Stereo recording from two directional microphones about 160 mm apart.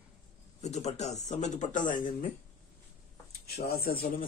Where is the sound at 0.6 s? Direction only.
45° left (ahead or behind).